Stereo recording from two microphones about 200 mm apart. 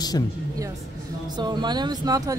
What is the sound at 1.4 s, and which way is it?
Speech, 20° right (ahead or behind).